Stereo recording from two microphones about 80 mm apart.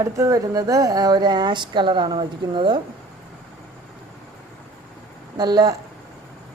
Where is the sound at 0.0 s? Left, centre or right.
Right.